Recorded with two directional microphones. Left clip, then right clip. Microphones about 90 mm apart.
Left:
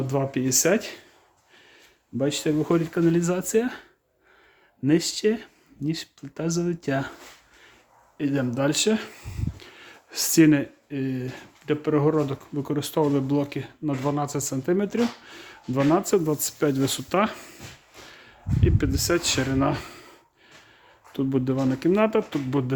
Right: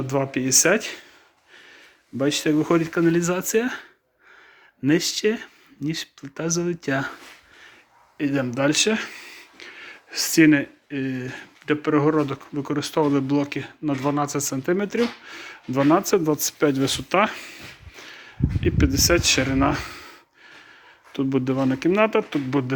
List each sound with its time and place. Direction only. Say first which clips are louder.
0.1 s speech: right 4 dB; 25° left (ahead or behind)
2.1 s speech: right 3 dB; 15° left (ahead or behind)
4.9 s speech: right 1 dB; 20° left (ahead or behind)
8.2 s speech: right 2 dB; 30° left (ahead or behind); by 9.5 s 50° left (ahead or behind)
9.6 s a sound: right 6 dB; 40° left (ahead or behind); by 10.7 s 60° left (ahead or behind)
10.8 s speech: right 2 dB; 35° left (ahead or behind)
15.8 s speech: right 3 dB; 15° left (ahead or behind)
16.0 s speech: right 2 dB; 25° left (ahead or behind)
17.3 s speech: right 6 dB; 45° left (ahead or behind)
18.1 s speech: right 5 dB; 15° left (ahead or behind)